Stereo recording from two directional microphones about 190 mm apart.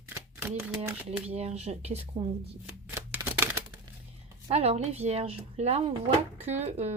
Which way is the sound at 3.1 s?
10° right (ahead or behind).